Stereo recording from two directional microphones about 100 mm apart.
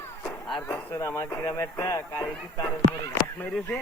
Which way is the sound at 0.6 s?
20° left (ahead or behind).